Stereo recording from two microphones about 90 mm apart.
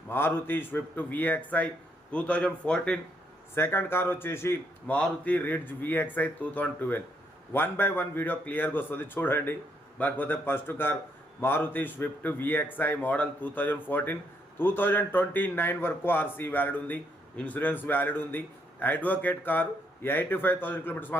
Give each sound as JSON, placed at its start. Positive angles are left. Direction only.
{"t": 0.1, "sound": "speech", "side_deg": 25}
{"t": 3.5, "sound": "speech", "side_deg": 25}
{"t": 4.9, "sound": "speech", "side_deg": 15}